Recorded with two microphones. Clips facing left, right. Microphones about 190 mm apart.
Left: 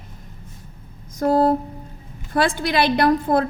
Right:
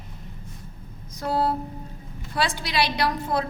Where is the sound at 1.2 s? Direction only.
45° left (ahead or behind).